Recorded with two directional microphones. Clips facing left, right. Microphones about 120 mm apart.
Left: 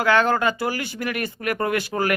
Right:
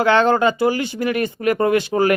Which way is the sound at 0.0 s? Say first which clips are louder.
Right 4 dB; 25° right (ahead or behind).